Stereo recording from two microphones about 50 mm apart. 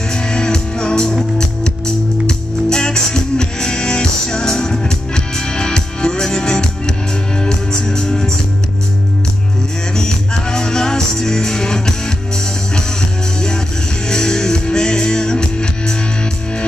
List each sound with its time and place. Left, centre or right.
0.1 s music: centre
9.9 s music: centre
14.0 s music: centre